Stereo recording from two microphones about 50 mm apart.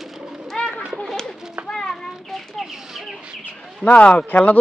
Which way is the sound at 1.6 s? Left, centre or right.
Centre.